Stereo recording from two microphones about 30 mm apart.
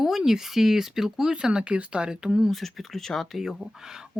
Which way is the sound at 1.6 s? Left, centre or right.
Right.